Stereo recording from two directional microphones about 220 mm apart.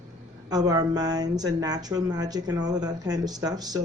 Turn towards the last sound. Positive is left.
turn(degrees=-15)  # may be behind; listen again after turning